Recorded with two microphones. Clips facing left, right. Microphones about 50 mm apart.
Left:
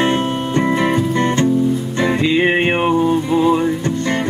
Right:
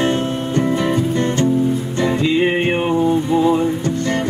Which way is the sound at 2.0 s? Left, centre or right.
Left.